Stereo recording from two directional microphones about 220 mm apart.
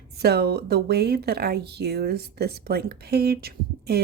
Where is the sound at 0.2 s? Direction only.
45° right (ahead or behind).